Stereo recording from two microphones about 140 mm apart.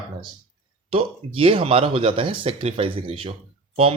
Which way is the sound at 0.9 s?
40° right (ahead or behind).